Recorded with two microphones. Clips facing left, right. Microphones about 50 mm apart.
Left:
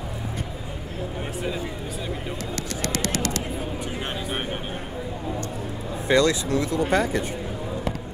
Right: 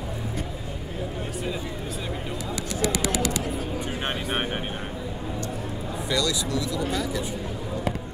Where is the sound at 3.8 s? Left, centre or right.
Right.